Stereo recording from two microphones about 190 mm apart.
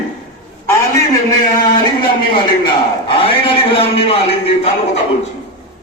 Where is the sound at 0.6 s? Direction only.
15° left (ahead or behind).